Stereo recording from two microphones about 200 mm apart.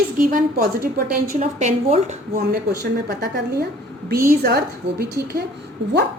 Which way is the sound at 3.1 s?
55° right (ahead or behind).